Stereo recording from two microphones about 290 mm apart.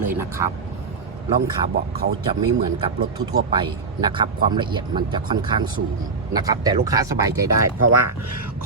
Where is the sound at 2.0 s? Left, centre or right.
Right.